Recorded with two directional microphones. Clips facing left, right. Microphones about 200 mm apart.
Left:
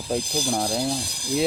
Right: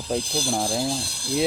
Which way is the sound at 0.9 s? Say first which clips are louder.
Left 1 dB; 15° left (ahead or behind).